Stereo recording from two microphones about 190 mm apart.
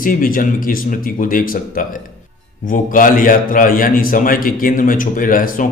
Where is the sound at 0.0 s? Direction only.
45° left (ahead or behind).